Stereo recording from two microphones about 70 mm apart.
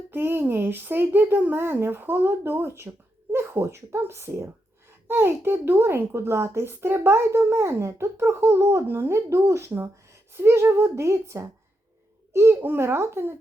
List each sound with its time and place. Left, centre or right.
0.1 s a woman's voice: right